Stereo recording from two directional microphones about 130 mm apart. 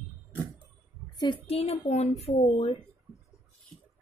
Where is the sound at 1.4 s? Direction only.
50° left (ahead or behind).